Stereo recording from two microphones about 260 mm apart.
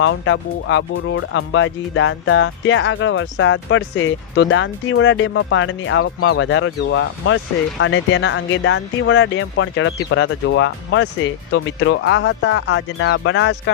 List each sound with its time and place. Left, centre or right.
0.0 s speech: left